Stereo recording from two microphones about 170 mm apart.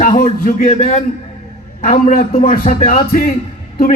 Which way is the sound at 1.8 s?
60° left (ahead or behind).